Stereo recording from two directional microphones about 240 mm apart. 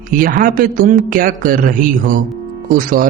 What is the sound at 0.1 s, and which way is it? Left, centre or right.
Speech, right.